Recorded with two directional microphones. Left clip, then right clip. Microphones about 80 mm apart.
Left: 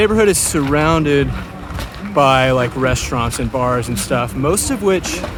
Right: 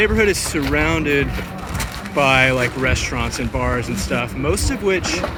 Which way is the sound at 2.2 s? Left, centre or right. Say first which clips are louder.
Left 3 dB; left.